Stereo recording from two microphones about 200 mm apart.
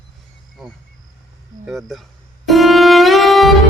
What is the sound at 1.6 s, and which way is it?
Speech, centre (ahead or behind).